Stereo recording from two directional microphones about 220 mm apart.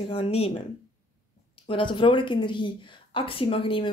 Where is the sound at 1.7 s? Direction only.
20° left (ahead or behind).